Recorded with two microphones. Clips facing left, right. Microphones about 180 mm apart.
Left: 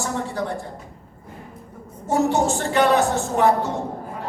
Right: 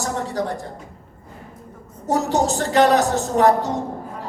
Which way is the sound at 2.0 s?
40° right (ahead or behind).